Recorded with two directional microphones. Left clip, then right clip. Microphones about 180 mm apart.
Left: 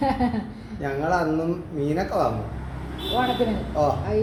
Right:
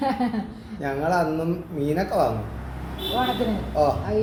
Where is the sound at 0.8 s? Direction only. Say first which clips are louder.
Right 1 dB; 15° right (ahead or behind).